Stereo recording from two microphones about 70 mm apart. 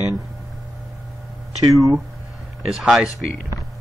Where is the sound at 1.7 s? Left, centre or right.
Right.